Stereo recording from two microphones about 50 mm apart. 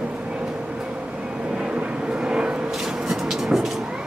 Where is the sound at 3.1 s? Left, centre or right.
Centre.